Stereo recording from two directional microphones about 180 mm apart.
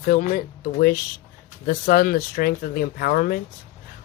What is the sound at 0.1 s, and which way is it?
Speech, 50° left (ahead or behind).